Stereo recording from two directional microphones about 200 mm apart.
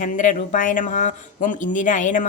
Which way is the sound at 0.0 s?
40° left (ahead or behind).